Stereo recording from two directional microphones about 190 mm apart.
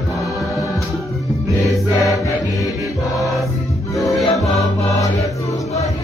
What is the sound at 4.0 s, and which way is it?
Music, 15° left (ahead or behind).